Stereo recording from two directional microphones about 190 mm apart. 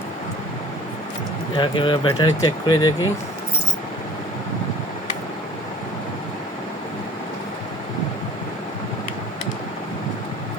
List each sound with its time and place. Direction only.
1.5 s speech: 25° left (ahead or behind)